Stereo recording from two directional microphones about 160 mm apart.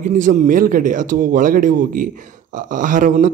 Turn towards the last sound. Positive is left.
turn(degrees=-55)  # may be behind; listen again after turning